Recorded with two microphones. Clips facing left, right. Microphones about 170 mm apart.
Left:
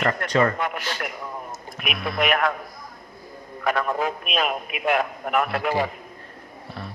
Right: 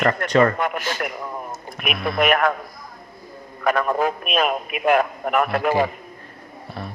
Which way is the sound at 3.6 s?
50° right (ahead or behind).